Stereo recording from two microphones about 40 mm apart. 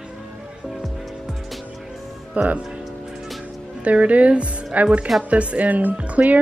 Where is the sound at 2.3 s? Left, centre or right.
Right.